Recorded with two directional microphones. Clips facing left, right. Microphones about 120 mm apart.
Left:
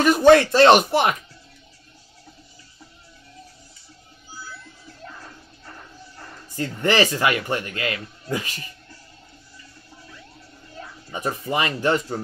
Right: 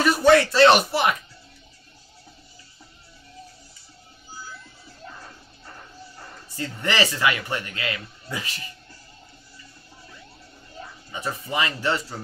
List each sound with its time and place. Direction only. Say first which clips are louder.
0.2 s speech: left 2 dB; 50° left (ahead or behind)
6.5 s speech: left 5 dB; 45° left (ahead or behind)
11.1 s speech: left 4 dB; 45° left (ahead or behind)